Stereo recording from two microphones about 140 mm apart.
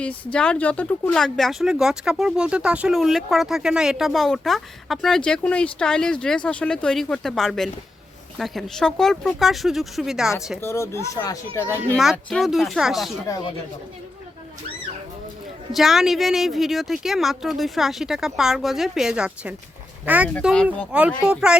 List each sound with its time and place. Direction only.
0.0 s speech: 10° left (ahead or behind)
10.6 s speech: 20° left (ahead or behind)
12.1 s speech: centre (ahead or behind)
13.2 s speech: 30° left (ahead or behind)
15.7 s speech: centre (ahead or behind)
20.4 s speech: centre (ahead or behind)